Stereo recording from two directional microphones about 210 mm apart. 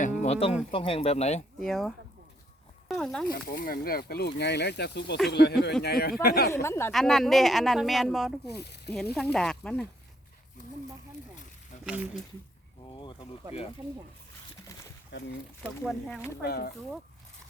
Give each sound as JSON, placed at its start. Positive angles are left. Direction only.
{"t": 0.0, "sound": "speech", "side_deg": 35}
{"t": 1.5, "sound": "speech", "side_deg": 0}
{"t": 2.9, "sound": "speech", "side_deg": 5}
{"t": 3.2, "sound": "speech", "side_deg": 45}
{"t": 6.5, "sound": "speech", "side_deg": 10}
{"t": 6.9, "sound": "speech", "side_deg": 0}
{"t": 8.4, "sound": "speech", "side_deg": 50}
{"t": 9.1, "sound": "speech", "side_deg": 5}
{"t": 11.9, "sound": "speech", "side_deg": -5}
{"t": 12.9, "sound": "a sound", "side_deg": 25}
{"t": 15.6, "sound": "speech", "side_deg": 5}
{"t": 16.4, "sound": "speech", "side_deg": 50}